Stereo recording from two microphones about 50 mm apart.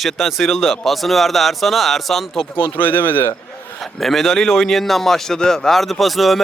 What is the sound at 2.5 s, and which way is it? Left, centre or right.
Speech, left.